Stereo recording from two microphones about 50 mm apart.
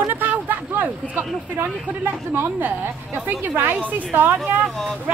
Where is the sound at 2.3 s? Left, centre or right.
Right.